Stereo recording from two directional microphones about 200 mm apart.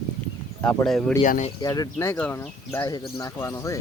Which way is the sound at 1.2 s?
40° left (ahead or behind).